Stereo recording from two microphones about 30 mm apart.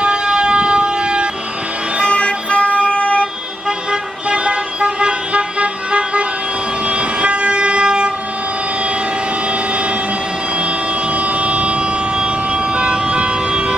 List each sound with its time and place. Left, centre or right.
0.0 s vehicle: right
2.0 s music: left
3.9 s vehicle: right
11.1 s vehicle: right